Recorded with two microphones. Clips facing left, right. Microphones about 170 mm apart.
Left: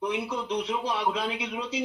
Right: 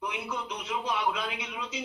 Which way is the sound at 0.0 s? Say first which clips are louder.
Left 5 dB; 35° left (ahead or behind).